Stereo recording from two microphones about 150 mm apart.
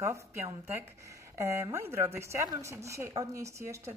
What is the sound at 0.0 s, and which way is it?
A woman's voice, 20° right (ahead or behind).